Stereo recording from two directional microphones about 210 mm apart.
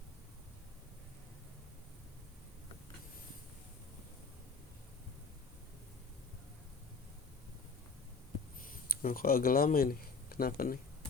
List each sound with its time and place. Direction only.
9.0 s speech: 40° left (ahead or behind)